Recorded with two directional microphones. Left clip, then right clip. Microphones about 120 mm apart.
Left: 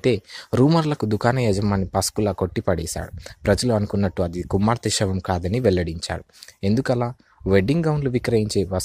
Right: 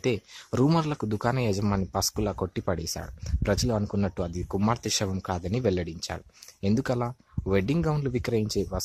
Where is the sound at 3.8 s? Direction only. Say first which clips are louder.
Left 6 dB; 15° left (ahead or behind).